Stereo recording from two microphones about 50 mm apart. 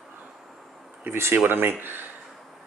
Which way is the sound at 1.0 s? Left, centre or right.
Right.